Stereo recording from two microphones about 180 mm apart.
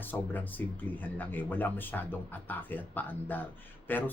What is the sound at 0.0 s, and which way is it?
Speech, 10° left (ahead or behind).